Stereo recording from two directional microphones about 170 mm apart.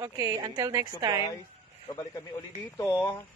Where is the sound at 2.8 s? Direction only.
15° left (ahead or behind).